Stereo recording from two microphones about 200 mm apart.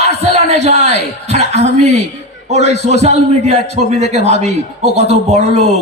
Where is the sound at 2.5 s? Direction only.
35° right (ahead or behind).